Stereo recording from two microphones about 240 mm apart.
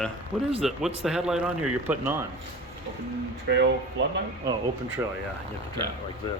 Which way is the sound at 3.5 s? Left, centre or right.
Right.